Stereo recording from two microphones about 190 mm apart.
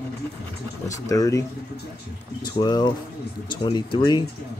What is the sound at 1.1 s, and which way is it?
Speech, 20° left (ahead or behind).